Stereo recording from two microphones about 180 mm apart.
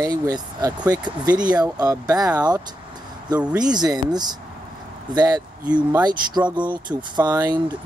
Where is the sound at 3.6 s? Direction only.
20° right (ahead or behind).